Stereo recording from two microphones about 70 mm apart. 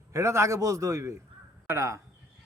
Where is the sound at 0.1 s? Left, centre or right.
Right.